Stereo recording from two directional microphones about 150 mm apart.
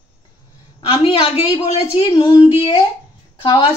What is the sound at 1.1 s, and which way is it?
A woman's voice, 40° left (ahead or behind).